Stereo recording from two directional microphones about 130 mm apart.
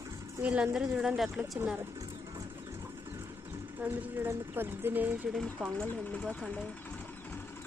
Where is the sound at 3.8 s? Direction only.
15° right (ahead or behind).